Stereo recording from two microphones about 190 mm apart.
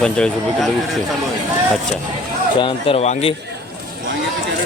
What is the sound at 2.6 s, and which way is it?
Speech, 30° left (ahead or behind).